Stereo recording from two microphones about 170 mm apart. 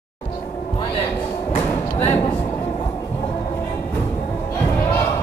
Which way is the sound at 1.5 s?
35° left (ahead or behind).